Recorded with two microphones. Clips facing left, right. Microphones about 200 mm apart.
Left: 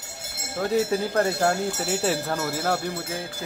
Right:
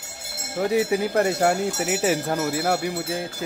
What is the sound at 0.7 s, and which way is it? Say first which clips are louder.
Speech: right 1 dB; 15° right (ahead or behind).